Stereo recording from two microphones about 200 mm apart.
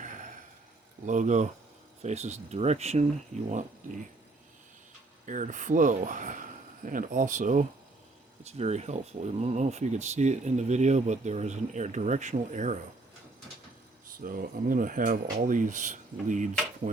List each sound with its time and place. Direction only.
1.0 s speech: 40° right (ahead or behind)
5.2 s speech: 40° right (ahead or behind)
14.3 s speech: 45° right (ahead or behind)